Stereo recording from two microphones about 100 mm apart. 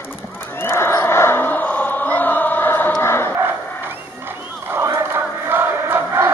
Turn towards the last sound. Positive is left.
turn(degrees=-20)  # may be behind; listen again after turning